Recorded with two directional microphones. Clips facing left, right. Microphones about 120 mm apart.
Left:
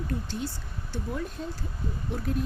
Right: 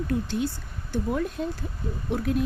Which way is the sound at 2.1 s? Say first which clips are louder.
Right 6 dB; 80° right.